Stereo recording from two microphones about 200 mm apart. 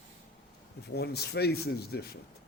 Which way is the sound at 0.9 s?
55° left (ahead or behind).